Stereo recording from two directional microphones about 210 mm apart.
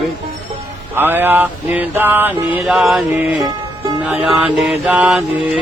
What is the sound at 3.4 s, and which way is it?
Music, 20° right (ahead or behind).